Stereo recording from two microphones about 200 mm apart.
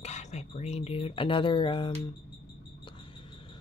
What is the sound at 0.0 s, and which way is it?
Speech, 35° left (ahead or behind).